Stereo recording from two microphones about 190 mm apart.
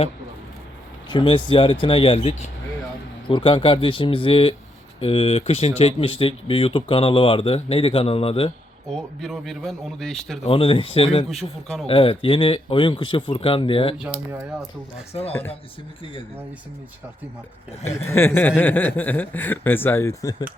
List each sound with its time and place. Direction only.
1.1 s speech: 25° left (ahead or behind)
8.9 s a man's voice: centre (ahead or behind)
10.4 s speech: 30° left (ahead or behind)
14.0 s speech: 10° right (ahead or behind)
15.3 s speech: 10° left (ahead or behind)
17.8 s speech: 15° left (ahead or behind)